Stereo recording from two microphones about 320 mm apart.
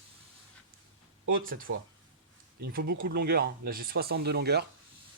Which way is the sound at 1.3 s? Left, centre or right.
Right.